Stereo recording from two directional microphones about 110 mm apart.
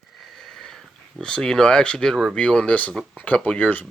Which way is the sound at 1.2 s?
5° left (ahead or behind).